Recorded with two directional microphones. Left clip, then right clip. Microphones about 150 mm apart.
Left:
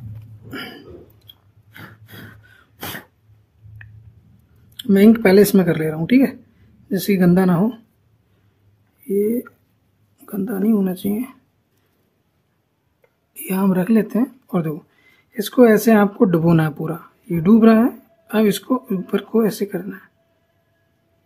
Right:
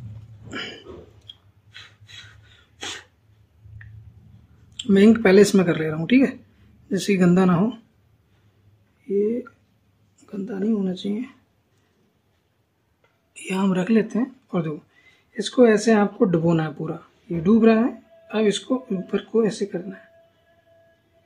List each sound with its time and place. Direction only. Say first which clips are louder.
0.5 s hiccup: even; 35° left (ahead or behind)
2.4 s cough: left 1 dB; 45° left (ahead or behind)
4.8 s speech: left 3 dB; 25° left (ahead or behind)
9.0 s speech: left 3 dB; 35° left (ahead or behind)
10.2 s speech: left 5 dB; 45° left (ahead or behind)
13.3 s speech: left 3 dB; 30° left (ahead or behind)